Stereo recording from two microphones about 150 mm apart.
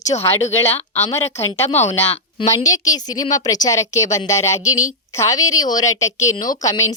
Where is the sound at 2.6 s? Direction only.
25° left (ahead or behind).